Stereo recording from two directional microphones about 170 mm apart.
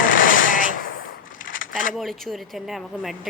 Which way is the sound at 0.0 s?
55° left (ahead or behind).